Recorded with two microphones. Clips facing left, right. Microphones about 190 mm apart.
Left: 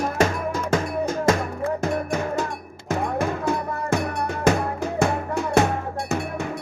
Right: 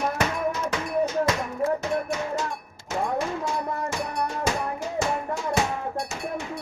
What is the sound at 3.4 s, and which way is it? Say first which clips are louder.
Music: left 4 dB; 60° left (ahead or behind).